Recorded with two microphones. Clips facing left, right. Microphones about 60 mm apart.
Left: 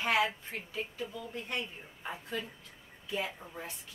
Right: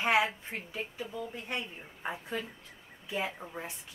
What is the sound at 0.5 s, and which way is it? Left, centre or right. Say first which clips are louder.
Speech: right 1 dB; centre.